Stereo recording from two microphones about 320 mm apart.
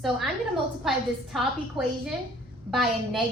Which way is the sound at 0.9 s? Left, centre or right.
Centre.